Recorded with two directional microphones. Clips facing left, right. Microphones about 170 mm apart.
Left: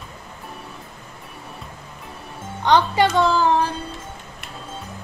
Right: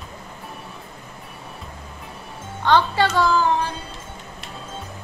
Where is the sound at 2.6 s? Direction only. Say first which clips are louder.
Left 1 dB; 15° left (ahead or behind).